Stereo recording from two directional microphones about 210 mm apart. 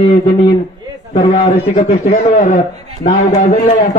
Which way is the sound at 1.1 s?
25° left (ahead or behind).